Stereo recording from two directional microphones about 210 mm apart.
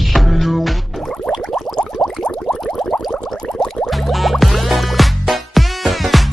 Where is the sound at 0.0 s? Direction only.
Centre (ahead or behind).